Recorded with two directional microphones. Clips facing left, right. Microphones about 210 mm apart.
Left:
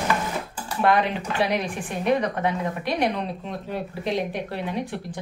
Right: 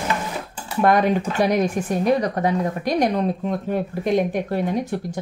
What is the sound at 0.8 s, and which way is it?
Speech, 45° right (ahead or behind).